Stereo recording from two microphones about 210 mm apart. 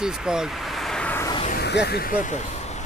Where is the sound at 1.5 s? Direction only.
50° left (ahead or behind); by 2.8 s 30° left (ahead or behind).